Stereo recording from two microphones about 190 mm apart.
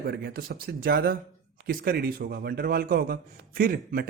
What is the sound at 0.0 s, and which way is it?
Speech, 55° right (ahead or behind).